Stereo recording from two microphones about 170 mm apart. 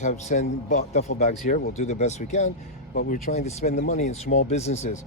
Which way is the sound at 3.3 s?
40° left (ahead or behind).